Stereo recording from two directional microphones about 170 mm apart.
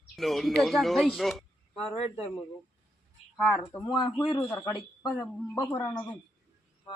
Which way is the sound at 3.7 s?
15° left (ahead or behind).